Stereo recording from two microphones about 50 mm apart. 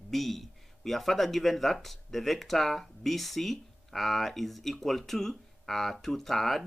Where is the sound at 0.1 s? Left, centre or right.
Centre.